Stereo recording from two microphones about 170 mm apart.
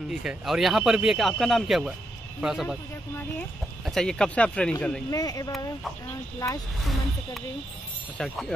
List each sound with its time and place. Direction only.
0.1 s speech: 5° right (ahead or behind)
5.1 s speech: 20° left (ahead or behind)
8.2 s speech: 5° left (ahead or behind)